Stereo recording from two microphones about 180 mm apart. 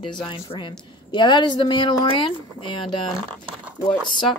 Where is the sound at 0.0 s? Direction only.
25° left (ahead or behind).